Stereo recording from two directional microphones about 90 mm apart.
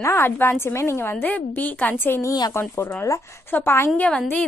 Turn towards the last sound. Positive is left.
turn(degrees=10)  # may be behind; listen again after turning